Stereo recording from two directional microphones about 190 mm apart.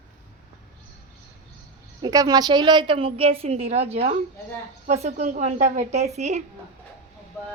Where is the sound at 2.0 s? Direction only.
20° right (ahead or behind); by 6.4 s 35° right (ahead or behind).